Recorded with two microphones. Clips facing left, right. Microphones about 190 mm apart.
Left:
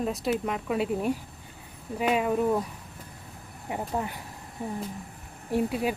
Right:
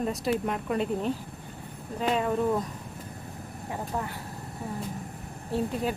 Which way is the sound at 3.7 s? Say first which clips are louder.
Left 2 dB; 20° left (ahead or behind).